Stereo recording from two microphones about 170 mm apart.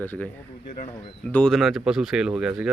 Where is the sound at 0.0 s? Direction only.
10° left (ahead or behind).